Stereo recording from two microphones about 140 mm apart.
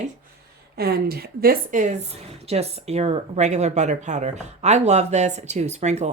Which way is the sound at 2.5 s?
50° right (ahead or behind).